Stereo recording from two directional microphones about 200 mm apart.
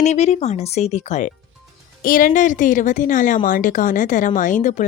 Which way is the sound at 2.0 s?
45° left (ahead or behind).